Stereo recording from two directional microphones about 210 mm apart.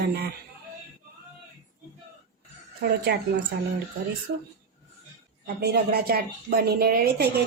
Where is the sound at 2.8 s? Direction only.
45° right (ahead or behind).